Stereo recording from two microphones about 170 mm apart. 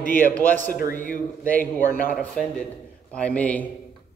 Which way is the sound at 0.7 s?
55° left (ahead or behind).